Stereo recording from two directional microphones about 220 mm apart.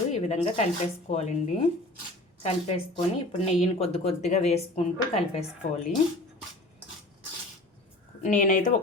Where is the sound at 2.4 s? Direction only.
30° left (ahead or behind).